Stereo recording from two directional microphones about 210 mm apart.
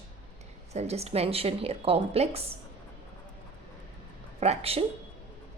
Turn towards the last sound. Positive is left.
turn(degrees=-30)  # may be behind; listen again after turning